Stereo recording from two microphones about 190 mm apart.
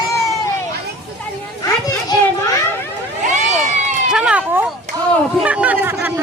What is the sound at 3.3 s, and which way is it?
Cat, 40° right (ahead or behind).